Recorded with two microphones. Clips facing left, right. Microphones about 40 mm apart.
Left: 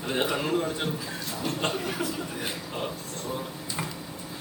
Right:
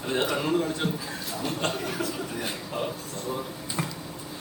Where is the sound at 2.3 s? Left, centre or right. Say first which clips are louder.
Right 2 dB; centre.